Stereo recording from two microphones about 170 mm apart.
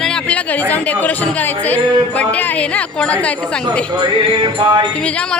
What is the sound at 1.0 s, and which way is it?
A woman's voice, 10° left (ahead or behind).